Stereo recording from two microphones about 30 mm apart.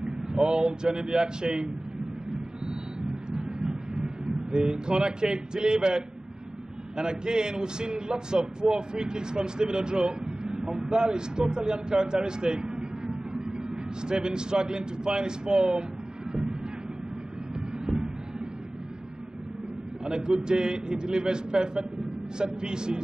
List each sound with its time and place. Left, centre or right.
0.0 s a man's voice: right
2.6 s vehicle: right
4.0 s a man's voice: right
16.3 s a sound: right
17.8 s heart sounds: right
20.1 s a man's voice: right